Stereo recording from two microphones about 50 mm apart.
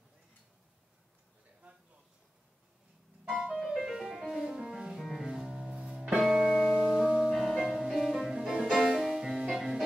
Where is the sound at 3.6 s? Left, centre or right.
Centre.